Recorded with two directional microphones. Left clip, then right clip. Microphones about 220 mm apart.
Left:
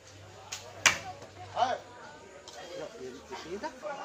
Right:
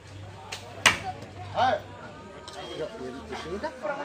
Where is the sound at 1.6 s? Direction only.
15° right (ahead or behind).